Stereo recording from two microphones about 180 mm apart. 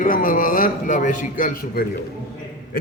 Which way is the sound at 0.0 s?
50° left (ahead or behind).